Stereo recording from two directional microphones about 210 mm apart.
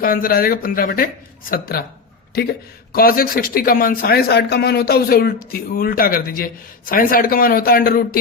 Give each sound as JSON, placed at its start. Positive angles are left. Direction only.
{"t": 0.0, "sound": "a man's voice", "side_deg": 45}
{"t": 2.9, "sound": "a man's voice", "side_deg": 45}